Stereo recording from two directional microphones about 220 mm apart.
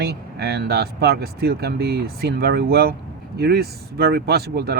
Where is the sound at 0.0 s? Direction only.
45° right (ahead or behind).